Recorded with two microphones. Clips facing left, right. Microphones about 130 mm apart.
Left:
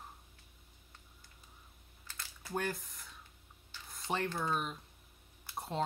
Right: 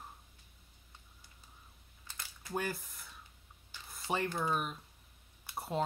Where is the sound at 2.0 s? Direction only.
15° right (ahead or behind).